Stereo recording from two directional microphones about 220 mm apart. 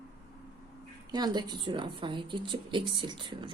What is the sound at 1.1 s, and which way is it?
A woman's voice, 20° right (ahead or behind).